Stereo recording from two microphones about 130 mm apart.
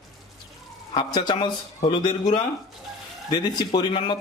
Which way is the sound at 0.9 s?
35° left (ahead or behind).